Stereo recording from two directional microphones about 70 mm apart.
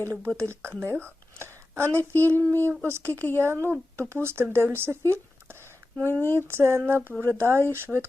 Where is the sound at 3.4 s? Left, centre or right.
Right.